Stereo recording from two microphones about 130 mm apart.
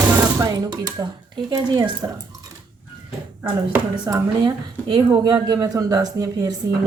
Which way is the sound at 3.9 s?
30° right (ahead or behind).